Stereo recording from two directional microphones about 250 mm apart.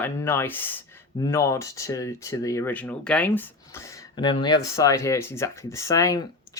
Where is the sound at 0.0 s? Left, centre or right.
Centre.